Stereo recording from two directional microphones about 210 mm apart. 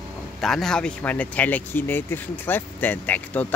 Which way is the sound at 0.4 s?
Centre (ahead or behind).